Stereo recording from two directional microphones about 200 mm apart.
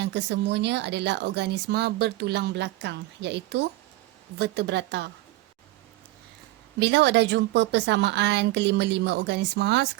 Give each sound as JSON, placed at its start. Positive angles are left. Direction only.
{"t": 0.0, "sound": "speech", "side_deg": -60}
{"t": 6.7, "sound": "speech", "side_deg": -60}